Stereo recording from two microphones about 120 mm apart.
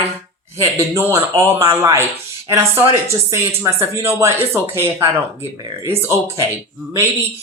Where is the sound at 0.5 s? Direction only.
20° right (ahead or behind).